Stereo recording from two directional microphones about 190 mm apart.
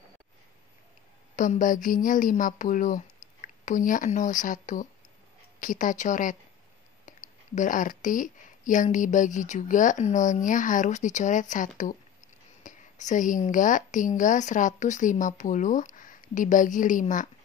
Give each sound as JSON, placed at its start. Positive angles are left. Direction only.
{"t": 1.3, "sound": "a woman's voice", "side_deg": 40}